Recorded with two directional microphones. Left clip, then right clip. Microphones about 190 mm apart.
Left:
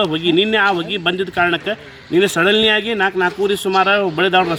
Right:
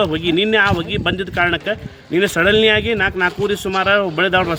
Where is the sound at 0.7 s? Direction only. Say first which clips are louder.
Left 1 dB; centre (ahead or behind).